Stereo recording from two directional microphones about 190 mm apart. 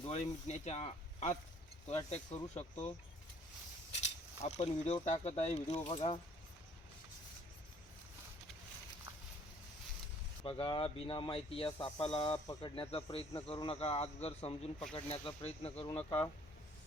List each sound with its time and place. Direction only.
0.0 s speech: 35° left (ahead or behind)
4.0 s pulleys: 35° left (ahead or behind)
5.0 s speech: 35° left (ahead or behind)
10.4 s speech: 25° left (ahead or behind)